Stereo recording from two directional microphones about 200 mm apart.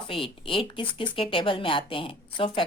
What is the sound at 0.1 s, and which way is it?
Speech, 25° left (ahead or behind).